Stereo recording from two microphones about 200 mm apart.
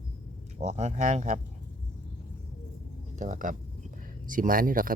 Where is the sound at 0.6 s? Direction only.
35° right (ahead or behind).